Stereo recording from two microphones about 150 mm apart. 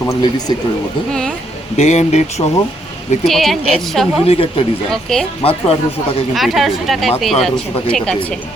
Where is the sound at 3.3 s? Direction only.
Centre (ahead or behind).